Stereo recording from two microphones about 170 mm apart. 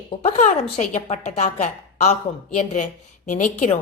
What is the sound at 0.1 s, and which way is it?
A woman's voice, 40° left (ahead or behind).